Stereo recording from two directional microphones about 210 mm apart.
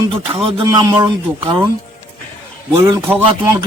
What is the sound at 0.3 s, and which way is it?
A man's voice, 25° right (ahead or behind).